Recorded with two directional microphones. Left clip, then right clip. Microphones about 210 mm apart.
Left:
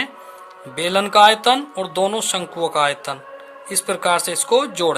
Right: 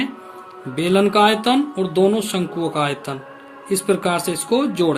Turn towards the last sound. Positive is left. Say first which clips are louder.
# left 2 dB
turn(degrees=35)  # may be behind; listen again after turning